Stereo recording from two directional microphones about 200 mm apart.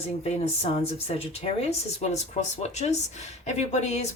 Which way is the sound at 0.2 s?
30° left (ahead or behind).